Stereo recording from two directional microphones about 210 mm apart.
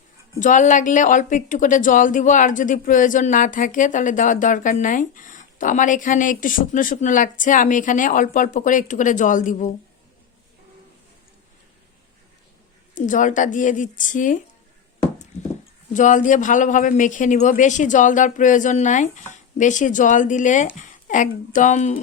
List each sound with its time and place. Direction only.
0.3 s a woman's voice: 35° left (ahead or behind)
12.9 s a woman's voice: 40° left (ahead or behind)
15.9 s a woman's voice: 35° left (ahead or behind)